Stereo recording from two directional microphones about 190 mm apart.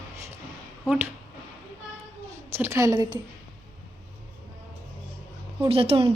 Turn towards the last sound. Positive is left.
turn(degrees=-30)  # may be behind; listen again after turning